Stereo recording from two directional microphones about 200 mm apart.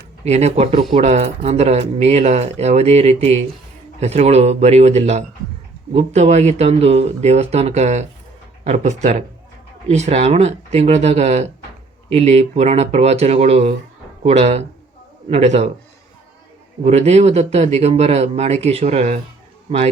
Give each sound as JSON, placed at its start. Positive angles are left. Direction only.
{"t": 0.3, "sound": "speech", "side_deg": -35}
{"t": 16.8, "sound": "speech", "side_deg": -35}